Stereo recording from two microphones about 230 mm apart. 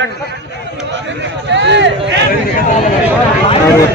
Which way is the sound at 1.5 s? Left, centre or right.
Right.